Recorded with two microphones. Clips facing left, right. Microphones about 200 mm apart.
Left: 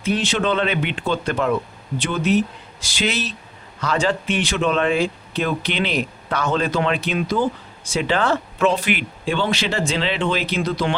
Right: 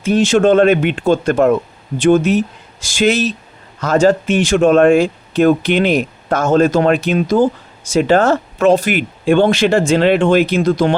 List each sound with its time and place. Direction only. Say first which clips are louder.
0.0 s speech: right 9 dB; 45° right (ahead or behind)